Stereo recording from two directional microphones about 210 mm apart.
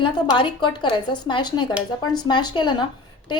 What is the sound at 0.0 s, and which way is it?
A woman's voice, 25° left (ahead or behind).